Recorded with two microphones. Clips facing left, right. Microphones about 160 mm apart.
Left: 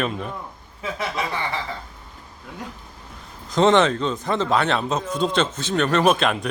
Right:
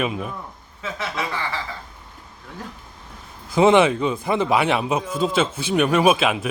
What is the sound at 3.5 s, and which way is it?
A man's voice, 10° right (ahead or behind).